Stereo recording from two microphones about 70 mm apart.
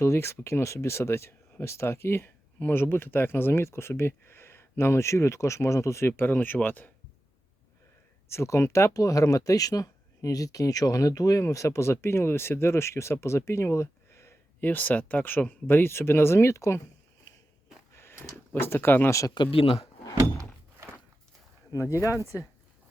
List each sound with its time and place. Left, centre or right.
0.0 s speech: left
8.3 s speech: left
17.9 s speech: left
19.4 s speech: left
20.2 s thunk: right
21.7 s speech: left